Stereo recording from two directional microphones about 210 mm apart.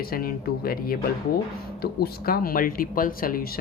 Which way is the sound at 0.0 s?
45° left (ahead or behind).